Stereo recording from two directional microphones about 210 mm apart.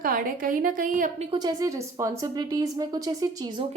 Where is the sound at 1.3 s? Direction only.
20° right (ahead or behind).